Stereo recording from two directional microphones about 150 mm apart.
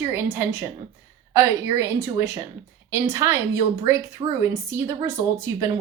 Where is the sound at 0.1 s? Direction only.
15° right (ahead or behind).